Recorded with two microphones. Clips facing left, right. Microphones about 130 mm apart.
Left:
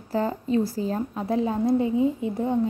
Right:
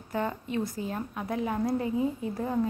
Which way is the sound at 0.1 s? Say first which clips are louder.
Left 7 dB; 30° left (ahead or behind).